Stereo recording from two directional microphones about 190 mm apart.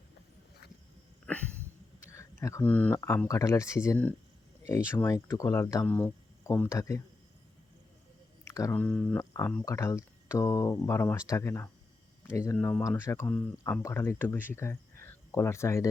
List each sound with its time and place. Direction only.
2.0 s a sound: 15° left (ahead or behind)
2.9 s speech: 15° left (ahead or behind)
8.5 s speech: 15° left (ahead or behind)